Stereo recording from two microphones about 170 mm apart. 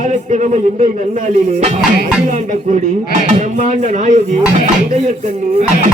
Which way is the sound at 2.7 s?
45° right (ahead or behind).